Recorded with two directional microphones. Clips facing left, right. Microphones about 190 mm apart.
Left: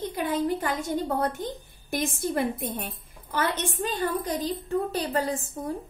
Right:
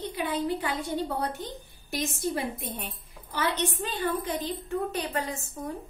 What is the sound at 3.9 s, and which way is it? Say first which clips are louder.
A woman's voice: left 4 dB; 40° left (ahead or behind).